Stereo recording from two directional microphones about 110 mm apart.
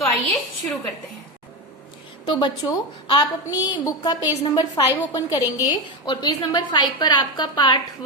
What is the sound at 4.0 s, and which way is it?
A woman's voice, 45° left (ahead or behind).